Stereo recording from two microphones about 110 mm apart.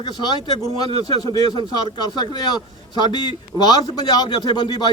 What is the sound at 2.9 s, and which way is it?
A man's voice, 40° left (ahead or behind).